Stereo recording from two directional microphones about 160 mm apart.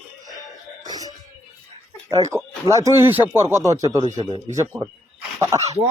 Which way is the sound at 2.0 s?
20° right (ahead or behind).